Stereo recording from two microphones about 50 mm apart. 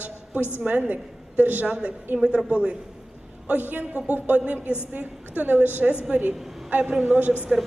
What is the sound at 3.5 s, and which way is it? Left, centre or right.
A woman's voice, right.